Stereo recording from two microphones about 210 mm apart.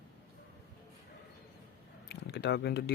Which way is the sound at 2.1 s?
55° left (ahead or behind).